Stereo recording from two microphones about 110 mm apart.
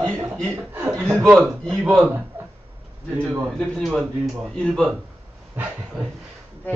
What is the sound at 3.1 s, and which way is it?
Speech, 20° right (ahead or behind).